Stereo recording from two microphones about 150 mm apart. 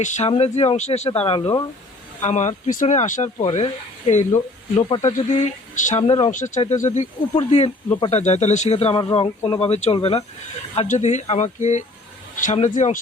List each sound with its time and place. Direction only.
0.3 s speech: 45° left (ahead or behind)
2.2 s speech: 50° left (ahead or behind)
6.3 s speech: 55° left (ahead or behind); by 10.2 s 40° left (ahead or behind)
10.8 s speech: 50° left (ahead or behind)